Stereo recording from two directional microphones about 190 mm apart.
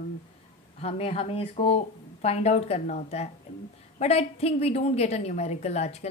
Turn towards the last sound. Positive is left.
turn(degrees=35)  # may be behind; listen again after turning